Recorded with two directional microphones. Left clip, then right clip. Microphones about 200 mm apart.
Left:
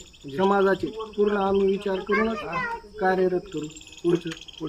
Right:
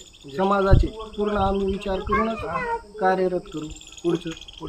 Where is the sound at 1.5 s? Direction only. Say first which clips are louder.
Left 3 dB; 35° right (ahead or behind).